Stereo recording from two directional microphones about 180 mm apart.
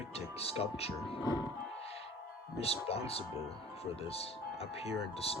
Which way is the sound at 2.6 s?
35° left (ahead or behind).